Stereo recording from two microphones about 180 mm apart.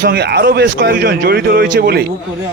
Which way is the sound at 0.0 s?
65° right (ahead or behind).